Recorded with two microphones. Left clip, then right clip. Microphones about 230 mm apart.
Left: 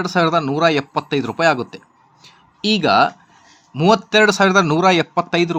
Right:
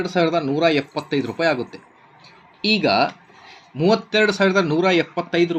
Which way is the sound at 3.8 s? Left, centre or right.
Left.